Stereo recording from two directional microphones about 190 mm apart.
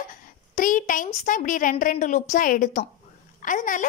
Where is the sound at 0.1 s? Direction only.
45° left (ahead or behind).